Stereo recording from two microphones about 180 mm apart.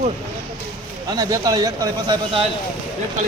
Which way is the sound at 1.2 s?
20° right (ahead or behind).